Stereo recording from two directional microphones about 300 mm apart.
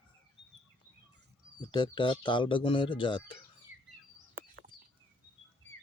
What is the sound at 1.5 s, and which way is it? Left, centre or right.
Speech, centre.